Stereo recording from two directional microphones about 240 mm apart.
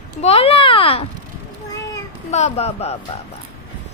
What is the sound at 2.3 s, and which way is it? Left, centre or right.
Speech, left.